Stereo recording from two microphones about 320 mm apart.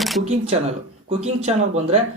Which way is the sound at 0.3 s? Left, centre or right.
Centre.